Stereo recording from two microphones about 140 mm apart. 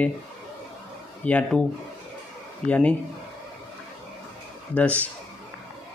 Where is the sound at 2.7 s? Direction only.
10° left (ahead or behind).